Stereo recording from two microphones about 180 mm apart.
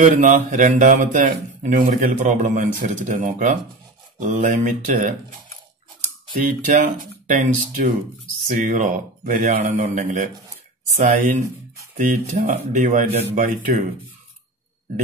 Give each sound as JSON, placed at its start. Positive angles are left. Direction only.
{"t": 0.0, "sound": "speech", "side_deg": -45}
{"t": 6.3, "sound": "speech", "side_deg": -45}
{"t": 11.4, "sound": "a sound", "side_deg": -20}
{"t": 12.0, "sound": "speech", "side_deg": -45}
{"t": 13.4, "sound": "speech", "side_deg": -50}